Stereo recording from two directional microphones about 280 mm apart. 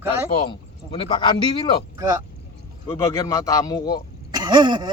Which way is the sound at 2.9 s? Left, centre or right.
Centre.